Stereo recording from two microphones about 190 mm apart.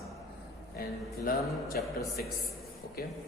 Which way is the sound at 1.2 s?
50° left (ahead or behind).